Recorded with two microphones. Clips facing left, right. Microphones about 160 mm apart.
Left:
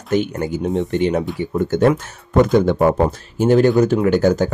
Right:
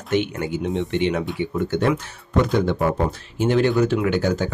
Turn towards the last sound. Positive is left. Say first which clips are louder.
# left 6 dB
turn(degrees=45)  # may be behind; listen again after turning